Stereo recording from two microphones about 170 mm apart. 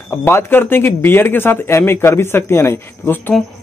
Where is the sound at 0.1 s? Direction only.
15° left (ahead or behind).